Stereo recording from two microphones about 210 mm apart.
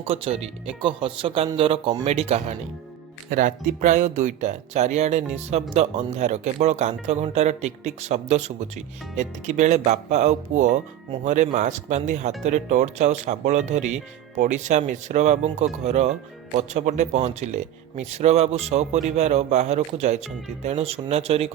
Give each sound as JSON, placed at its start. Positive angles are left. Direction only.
{"t": 0.0, "sound": "speech", "side_deg": -30}